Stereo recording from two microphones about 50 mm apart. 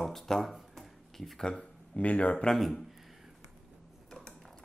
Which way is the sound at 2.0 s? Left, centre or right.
Left.